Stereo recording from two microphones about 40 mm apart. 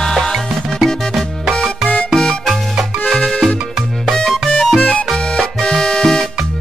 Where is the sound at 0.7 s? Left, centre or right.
Centre.